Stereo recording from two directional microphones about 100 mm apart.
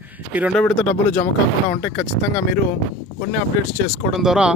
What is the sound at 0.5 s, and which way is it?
Speech, 15° left (ahead or behind).